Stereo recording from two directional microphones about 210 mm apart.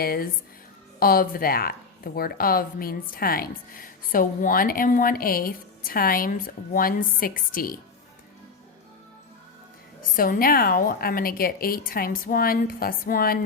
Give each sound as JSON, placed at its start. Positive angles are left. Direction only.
{"t": 0.0, "sound": "a woman's voice", "side_deg": 45}
{"t": 10.2, "sound": "a woman's voice", "side_deg": 45}